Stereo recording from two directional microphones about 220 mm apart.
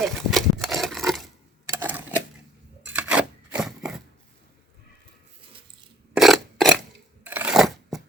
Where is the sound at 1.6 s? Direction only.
10° right (ahead or behind).